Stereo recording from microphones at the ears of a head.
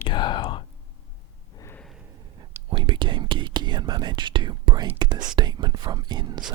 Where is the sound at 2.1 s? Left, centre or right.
Right.